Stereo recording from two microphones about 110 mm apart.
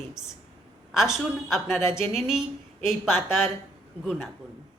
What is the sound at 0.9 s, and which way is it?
A woman's voice, 5° right (ahead or behind).